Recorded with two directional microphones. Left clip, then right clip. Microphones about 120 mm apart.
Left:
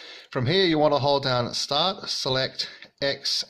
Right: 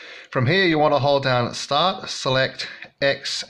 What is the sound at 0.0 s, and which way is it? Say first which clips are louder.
Speech: right 5 dB; 30° left (ahead or behind).